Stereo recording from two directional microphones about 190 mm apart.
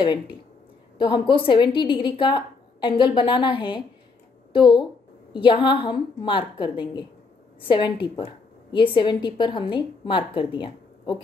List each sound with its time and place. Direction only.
0.0 s a woman's voice: 25° left (ahead or behind)